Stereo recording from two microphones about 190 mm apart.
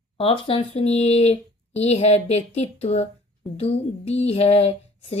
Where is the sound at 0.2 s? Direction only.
30° left (ahead or behind).